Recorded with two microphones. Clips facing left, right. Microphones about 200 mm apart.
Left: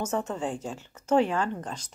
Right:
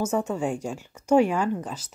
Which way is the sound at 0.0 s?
10° right (ahead or behind).